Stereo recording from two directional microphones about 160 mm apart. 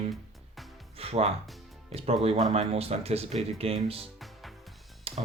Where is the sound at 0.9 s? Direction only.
40° right (ahead or behind).